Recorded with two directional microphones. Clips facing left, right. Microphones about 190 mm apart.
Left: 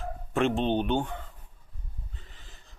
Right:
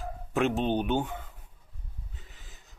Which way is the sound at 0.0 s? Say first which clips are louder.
Left 1 dB; centre (ahead or behind).